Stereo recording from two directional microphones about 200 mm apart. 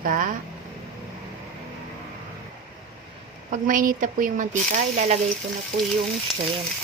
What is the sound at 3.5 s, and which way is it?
Speech, 40° right (ahead or behind).